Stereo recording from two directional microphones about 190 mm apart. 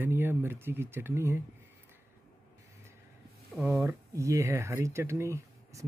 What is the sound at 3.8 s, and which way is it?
Speech, 15° right (ahead or behind).